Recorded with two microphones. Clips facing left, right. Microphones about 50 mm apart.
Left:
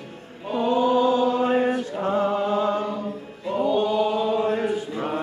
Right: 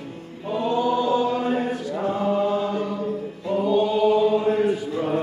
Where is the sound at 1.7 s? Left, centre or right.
Left.